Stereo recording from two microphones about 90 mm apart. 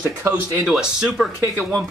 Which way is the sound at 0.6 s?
5° right (ahead or behind).